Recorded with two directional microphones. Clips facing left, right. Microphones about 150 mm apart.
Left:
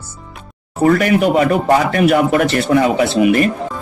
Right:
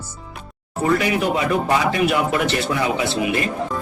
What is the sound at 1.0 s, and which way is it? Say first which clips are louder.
A man's voice: left 7 dB; 55° left (ahead or behind).